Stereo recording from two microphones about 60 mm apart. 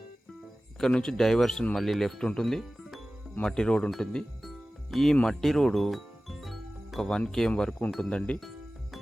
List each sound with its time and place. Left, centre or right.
0.8 s speech: centre
4.4 s music: centre
7.2 s speech: centre
8.4 s music: centre